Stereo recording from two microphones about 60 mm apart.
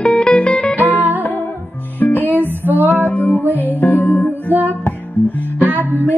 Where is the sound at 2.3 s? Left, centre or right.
Right.